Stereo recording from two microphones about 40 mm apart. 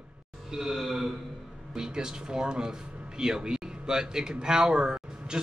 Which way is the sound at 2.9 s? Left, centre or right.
Right.